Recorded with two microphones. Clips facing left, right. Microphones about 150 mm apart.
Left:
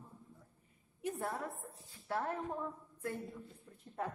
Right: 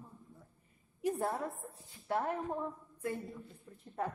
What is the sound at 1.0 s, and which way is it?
Speech, 35° right (ahead or behind).